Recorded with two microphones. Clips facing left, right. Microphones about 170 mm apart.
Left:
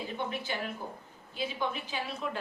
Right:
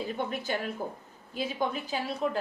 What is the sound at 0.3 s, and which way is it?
A woman's voice, 45° right (ahead or behind).